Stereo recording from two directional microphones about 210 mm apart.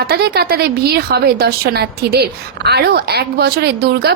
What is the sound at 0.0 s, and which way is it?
A woman's voice, 50° right (ahead or behind).